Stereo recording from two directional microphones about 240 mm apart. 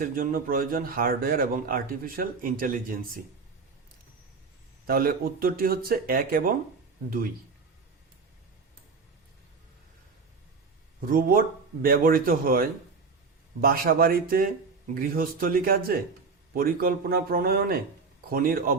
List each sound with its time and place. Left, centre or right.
0.0 s a man's voice: right
4.9 s a man's voice: right
11.0 s a man's voice: right